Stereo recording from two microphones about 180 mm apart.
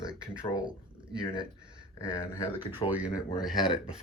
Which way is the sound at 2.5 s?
10° right (ahead or behind).